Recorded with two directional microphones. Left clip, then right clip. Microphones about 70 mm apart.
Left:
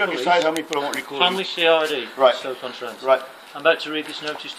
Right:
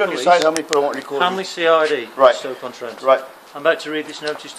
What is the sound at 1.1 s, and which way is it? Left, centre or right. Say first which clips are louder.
Speech: left 2 dB; right.